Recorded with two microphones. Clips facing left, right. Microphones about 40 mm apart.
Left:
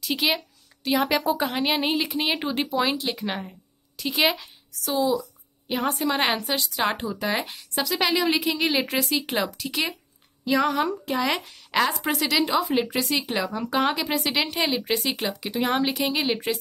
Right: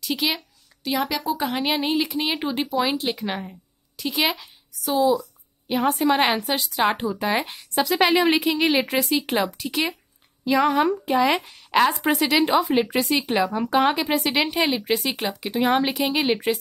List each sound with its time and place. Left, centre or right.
0.0 s speech: centre
1.0 s a woman's voice: left
1.4 s a woman's voice: centre
7.9 s a woman's voice: right
14.9 s speech: centre